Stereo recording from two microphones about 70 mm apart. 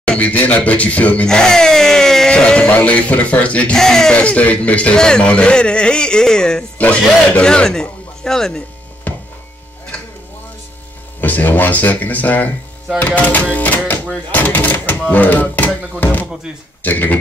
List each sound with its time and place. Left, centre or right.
0.0 s speech: centre
1.2 s speech: centre
3.7 s speech: centre
6.8 s speech: left
7.4 s speech: centre
9.1 s mains hum: left
11.1 s speech: left